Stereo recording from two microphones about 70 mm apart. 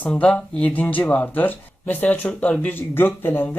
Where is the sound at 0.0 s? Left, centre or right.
Centre.